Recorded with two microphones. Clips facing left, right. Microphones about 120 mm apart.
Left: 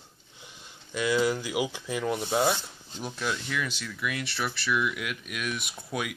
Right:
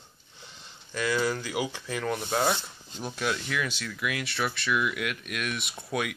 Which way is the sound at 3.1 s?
5° right (ahead or behind).